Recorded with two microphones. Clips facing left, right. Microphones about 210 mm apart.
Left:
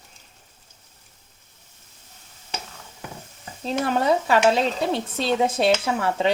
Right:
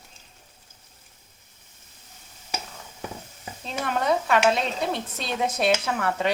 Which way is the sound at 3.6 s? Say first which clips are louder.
Left 4 dB; 30° left (ahead or behind).